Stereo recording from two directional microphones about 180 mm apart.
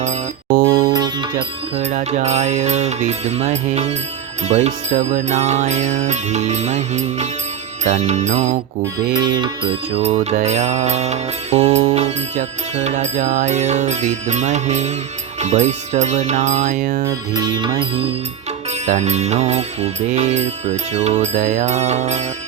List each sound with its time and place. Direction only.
0.0 s music: 45° right (ahead or behind)
0.8 s music: 25° right (ahead or behind)
1.8 s mantra: 40° right (ahead or behind)
9.1 s mantra: 25° right (ahead or behind); by 17.1 s 40° right (ahead or behind)
17.1 s music: 25° right (ahead or behind)
18.9 s mantra: 40° right (ahead or behind)